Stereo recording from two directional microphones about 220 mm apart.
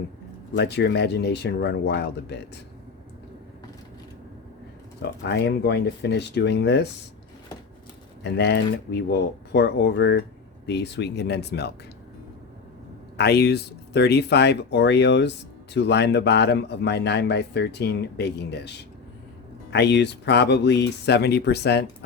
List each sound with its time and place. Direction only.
0.5 s speech: 50° left (ahead or behind)
5.2 s speech: 50° left (ahead or behind)
8.2 s speech: 50° left (ahead or behind)
13.1 s speech: 45° left (ahead or behind)